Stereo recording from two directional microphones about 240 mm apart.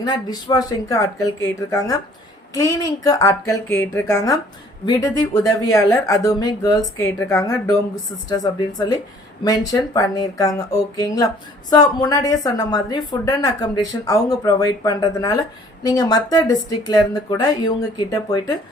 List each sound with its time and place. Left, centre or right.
0.0 s a woman's voice: centre